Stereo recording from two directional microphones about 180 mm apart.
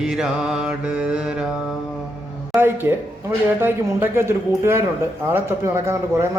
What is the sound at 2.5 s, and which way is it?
A man's voice, 10° right (ahead or behind).